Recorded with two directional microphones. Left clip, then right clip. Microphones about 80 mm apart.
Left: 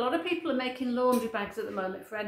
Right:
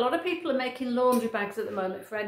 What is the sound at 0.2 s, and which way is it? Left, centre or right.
Speech, right.